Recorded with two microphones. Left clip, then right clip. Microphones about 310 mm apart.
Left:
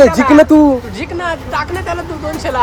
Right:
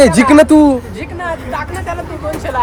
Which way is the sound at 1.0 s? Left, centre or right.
Left.